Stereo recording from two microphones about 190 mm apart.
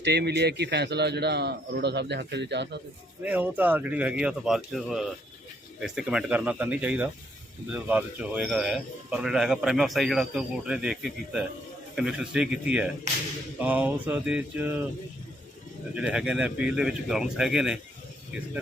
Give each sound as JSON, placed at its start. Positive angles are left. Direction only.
{"t": 0.0, "sound": "a man's voice", "side_deg": -60}
{"t": 3.2, "sound": "speech", "side_deg": -10}
{"t": 16.0, "sound": "speech", "side_deg": -5}